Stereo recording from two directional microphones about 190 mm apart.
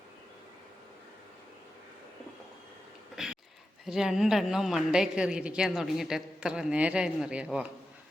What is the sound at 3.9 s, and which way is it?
A man's voice, 5° right (ahead or behind).